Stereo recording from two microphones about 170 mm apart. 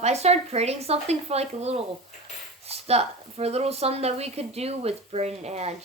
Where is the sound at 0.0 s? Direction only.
40° right (ahead or behind).